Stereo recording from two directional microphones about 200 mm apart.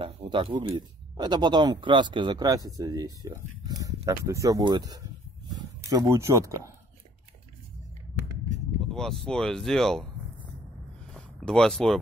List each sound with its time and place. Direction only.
0.0 s speech: 25° right (ahead or behind)
8.8 s speech: centre (ahead or behind)
11.1 s speech: 5° left (ahead or behind)